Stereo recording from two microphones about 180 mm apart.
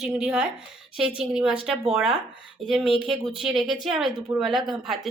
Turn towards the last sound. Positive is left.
turn(degrees=0)  # may be behind; listen again after turning